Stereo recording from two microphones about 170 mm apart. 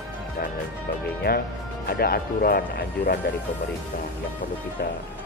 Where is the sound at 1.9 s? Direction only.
65° left (ahead or behind).